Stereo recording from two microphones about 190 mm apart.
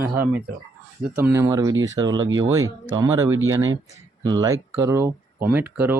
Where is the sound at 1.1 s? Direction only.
10° right (ahead or behind).